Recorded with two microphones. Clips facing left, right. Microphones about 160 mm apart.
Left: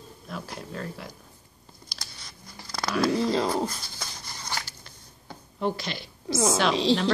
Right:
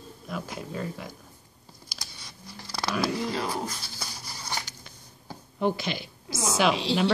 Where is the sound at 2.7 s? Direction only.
5° right (ahead or behind).